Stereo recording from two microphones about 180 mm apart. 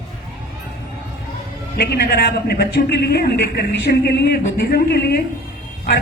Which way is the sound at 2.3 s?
55° left (ahead or behind).